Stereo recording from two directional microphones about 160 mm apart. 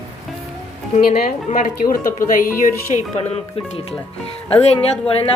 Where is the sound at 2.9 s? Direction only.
40° left (ahead or behind).